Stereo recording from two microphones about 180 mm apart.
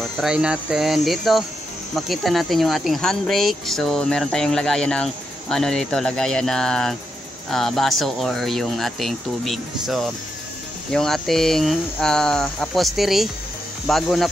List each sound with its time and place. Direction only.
0.0 s speech: 5° right (ahead or behind)